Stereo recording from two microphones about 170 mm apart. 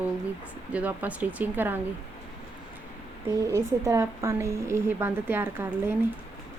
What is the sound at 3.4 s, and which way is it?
Speech, 15° right (ahead or behind).